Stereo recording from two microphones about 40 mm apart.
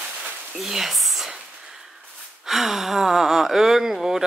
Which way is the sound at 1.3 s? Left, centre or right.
Centre.